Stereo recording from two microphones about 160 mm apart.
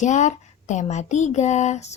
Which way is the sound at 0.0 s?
50° left (ahead or behind).